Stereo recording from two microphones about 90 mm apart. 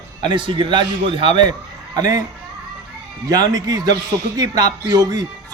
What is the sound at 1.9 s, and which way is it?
Speech, 45° right (ahead or behind).